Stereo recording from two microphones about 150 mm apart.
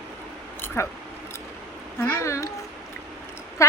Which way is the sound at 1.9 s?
15° left (ahead or behind).